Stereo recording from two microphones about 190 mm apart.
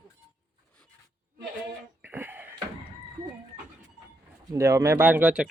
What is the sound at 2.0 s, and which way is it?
Cough, 10° right (ahead or behind).